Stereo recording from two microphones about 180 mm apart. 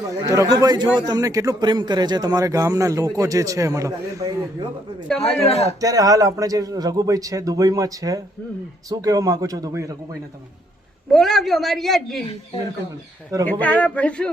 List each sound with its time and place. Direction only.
0.3 s a man's voice: 20° right (ahead or behind)
5.1 s speech: 35° left (ahead or behind)
5.8 s a man's voice: 20° right (ahead or behind)
11.1 s a man's voice: centre (ahead or behind)
13.4 s speech: 10° left (ahead or behind)